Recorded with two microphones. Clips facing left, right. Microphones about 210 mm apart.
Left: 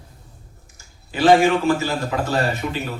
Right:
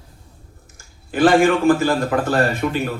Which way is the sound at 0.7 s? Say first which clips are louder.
Right 6 dB; 55° right (ahead or behind).